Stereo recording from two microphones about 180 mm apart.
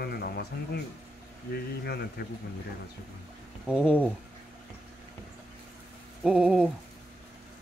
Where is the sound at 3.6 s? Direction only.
5° right (ahead or behind).